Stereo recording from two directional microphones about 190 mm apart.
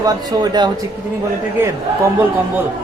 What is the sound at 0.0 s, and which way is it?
Speech, 20° right (ahead or behind).